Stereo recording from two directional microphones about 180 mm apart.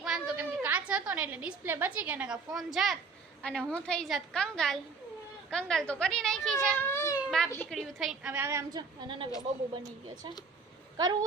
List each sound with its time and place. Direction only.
0.0 s a woman's voice: 5° right (ahead or behind)
6.7 s cat: 15° left (ahead or behind)
7.3 s a woman's voice: 5° left (ahead or behind)
7.8 s a woman's voice: centre (ahead or behind); by 9.3 s 25° right (ahead or behind)
10.9 s speech: 25° right (ahead or behind)